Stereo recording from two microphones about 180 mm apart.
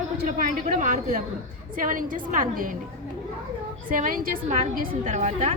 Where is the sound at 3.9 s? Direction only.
50° right (ahead or behind).